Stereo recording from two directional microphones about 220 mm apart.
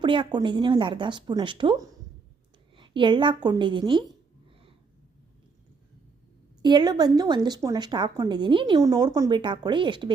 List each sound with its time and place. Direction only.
0.0 s a woman's voice: 20° right (ahead or behind)
6.6 s a woman's voice: 20° right (ahead or behind)